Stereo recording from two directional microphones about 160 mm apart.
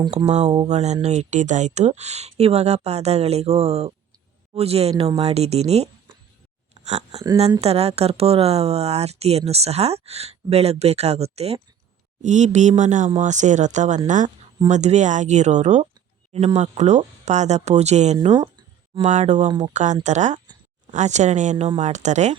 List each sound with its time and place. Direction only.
0.3 s speech: 45° right (ahead or behind)
19.5 s speech: 25° right (ahead or behind)
19.7 s speech: 50° right (ahead or behind)